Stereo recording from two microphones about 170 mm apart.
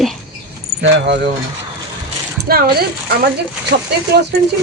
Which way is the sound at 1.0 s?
90° right.